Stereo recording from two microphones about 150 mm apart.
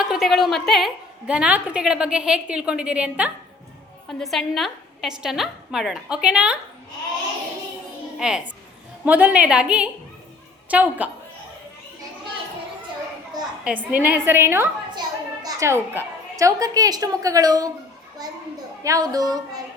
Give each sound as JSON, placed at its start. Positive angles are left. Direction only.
{"t": 0.0, "sound": "a woman's voice", "side_deg": -5}
{"t": 1.3, "sound": "a woman's voice", "side_deg": -10}
{"t": 8.2, "sound": "a woman's voice", "side_deg": -5}
{"t": 13.7, "sound": "a woman's voice", "side_deg": -10}